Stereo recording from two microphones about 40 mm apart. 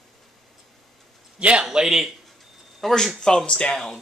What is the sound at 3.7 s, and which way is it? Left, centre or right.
Speech, centre.